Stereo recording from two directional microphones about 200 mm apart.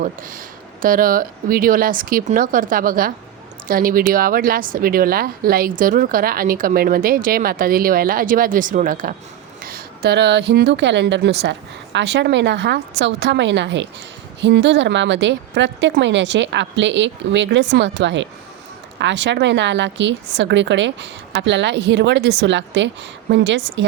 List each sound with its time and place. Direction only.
0.0 s a woman's voice: 45° right (ahead or behind); by 23.8 s 65° right (ahead or behind)